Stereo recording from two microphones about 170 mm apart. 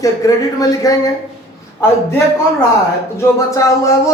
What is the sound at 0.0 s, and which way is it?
A man's voice, 20° left (ahead or behind).